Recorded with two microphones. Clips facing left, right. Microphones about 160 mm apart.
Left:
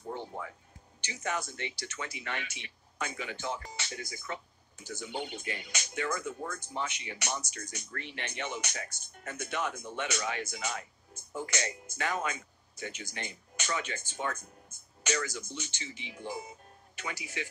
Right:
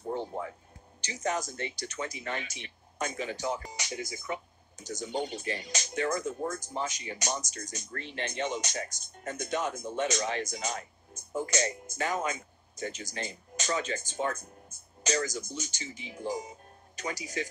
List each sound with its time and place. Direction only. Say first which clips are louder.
1.0 s speech: right 4 dB; 40° right (ahead or behind)
3.7 s speech: right 4 dB; 20° right (ahead or behind)
4.7 s speech: right 4 dB; 40° right (ahead or behind)